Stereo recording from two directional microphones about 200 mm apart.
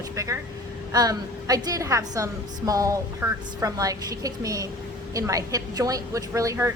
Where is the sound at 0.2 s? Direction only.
15° right (ahead or behind).